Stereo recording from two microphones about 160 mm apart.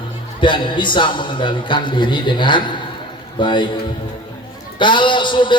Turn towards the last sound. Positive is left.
turn(degrees=30)  # may be behind; listen again after turning